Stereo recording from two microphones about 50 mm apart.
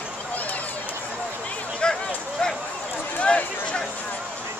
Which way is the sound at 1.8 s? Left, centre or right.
Centre.